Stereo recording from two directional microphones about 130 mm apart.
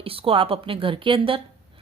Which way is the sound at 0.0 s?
45° right (ahead or behind).